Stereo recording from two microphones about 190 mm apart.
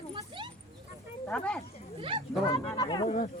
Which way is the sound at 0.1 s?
25° right (ahead or behind).